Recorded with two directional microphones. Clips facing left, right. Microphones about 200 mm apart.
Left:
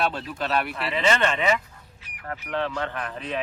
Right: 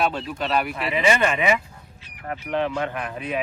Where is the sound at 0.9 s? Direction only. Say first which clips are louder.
Right 2 dB; 10° right (ahead or behind).